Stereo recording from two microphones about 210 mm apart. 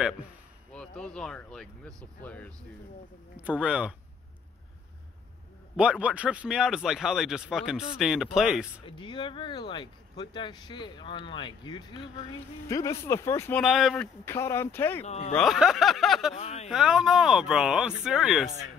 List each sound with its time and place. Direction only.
0.7 s speech: 5° left (ahead or behind)
3.3 s speech: 5° right (ahead or behind)
5.8 s speech: 5° right (ahead or behind)
8.8 s speech: 25° left (ahead or behind); by 14.0 s centre (ahead or behind)
14.2 s speech: 10° left (ahead or behind)
15.0 s speech: 30° left (ahead or behind)
15.3 s speech: centre (ahead or behind)
16.3 s speech: 30° left (ahead or behind)
16.6 s speech: centre (ahead or behind)